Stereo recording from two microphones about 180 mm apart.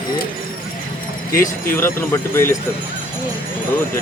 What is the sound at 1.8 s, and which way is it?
Speech, 15° left (ahead or behind).